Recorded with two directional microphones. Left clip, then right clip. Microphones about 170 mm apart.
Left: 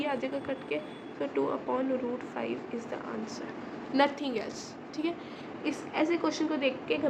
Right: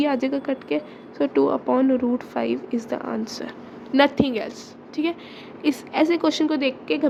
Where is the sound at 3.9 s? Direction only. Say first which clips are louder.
Right 9 dB; 55° right (ahead or behind).